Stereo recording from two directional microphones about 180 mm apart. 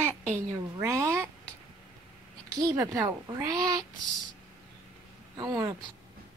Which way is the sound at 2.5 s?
20° right (ahead or behind).